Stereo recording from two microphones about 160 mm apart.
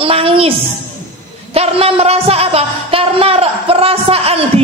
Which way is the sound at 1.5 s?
40° right (ahead or behind).